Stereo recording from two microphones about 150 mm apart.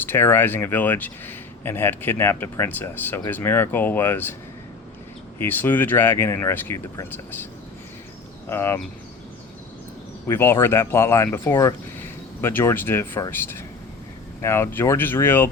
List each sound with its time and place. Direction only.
0.0 s speech: 15° left (ahead or behind)
5.4 s speech: 15° left (ahead or behind)
8.4 s speech: 15° left (ahead or behind)
10.2 s speech: 15° left (ahead or behind)